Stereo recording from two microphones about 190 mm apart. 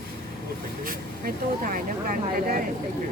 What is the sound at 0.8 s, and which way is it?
Speech, 45° right (ahead or behind).